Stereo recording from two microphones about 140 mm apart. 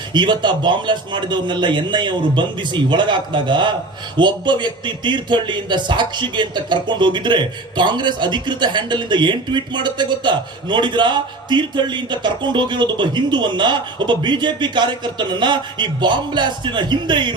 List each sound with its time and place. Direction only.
0.1 s a man's voice: 35° right (ahead or behind)